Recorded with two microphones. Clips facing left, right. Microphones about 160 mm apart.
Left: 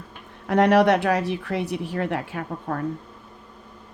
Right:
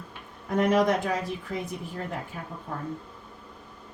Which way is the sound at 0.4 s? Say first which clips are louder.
Left 5 dB; 75° left (ahead or behind).